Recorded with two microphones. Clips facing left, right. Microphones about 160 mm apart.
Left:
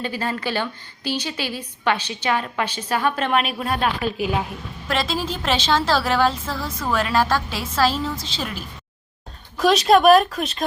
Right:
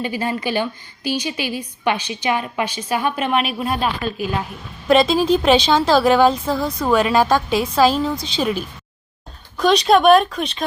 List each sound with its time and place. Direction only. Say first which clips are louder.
0.0 s a woman's voice: right 3 dB; 15° right (ahead or behind)
4.0 s a woman's voice: even; 15° left (ahead or behind)
4.9 s a woman's voice: right 10 dB; 20° right (ahead or behind)
9.6 s speech: right 1 dB; centre (ahead or behind)